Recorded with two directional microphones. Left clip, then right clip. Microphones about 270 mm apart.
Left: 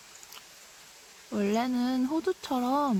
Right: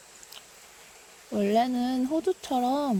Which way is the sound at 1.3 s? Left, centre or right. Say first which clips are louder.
Right 4 dB; centre.